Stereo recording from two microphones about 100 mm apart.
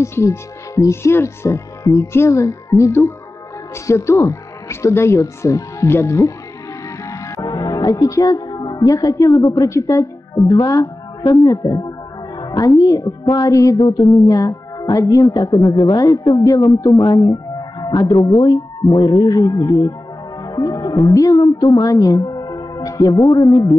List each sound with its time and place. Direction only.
0.0 s speech: 30° left (ahead or behind)
7.1 s music: 35° left (ahead or behind)
10.5 s speech: 35° left (ahead or behind)
13.7 s speech: 45° left (ahead or behind)
20.4 s music: 35° left (ahead or behind)
21.4 s a woman's voice: 45° left (ahead or behind)